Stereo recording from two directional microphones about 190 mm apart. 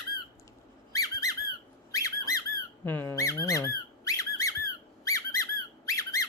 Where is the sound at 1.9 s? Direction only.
15° left (ahead or behind).